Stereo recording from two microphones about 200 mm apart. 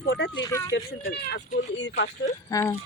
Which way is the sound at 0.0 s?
55° left (ahead or behind).